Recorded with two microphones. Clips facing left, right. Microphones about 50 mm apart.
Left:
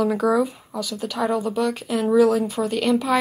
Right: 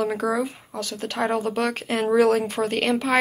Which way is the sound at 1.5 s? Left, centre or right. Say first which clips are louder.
Left 2 dB; right.